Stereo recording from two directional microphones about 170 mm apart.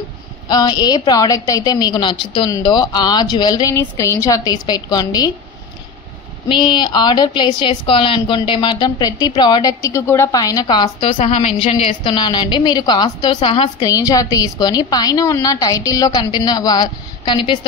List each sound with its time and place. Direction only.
0.5 s a woman's voice: 25° left (ahead or behind)
6.5 s a woman's voice: 25° left (ahead or behind)
11.1 s a woman's voice: 40° left (ahead or behind)